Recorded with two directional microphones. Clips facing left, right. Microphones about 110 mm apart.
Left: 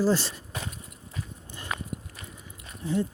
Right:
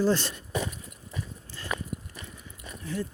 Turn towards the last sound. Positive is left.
turn(degrees=20)  # may be behind; listen again after turning